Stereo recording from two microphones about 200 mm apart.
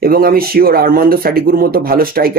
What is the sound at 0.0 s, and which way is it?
Speech, 45° right (ahead or behind).